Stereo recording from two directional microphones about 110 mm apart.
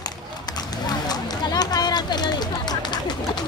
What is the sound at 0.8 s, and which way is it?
Run, 40° left (ahead or behind).